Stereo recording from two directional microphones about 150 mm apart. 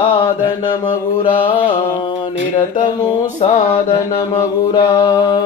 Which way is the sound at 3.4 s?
55° left (ahead or behind).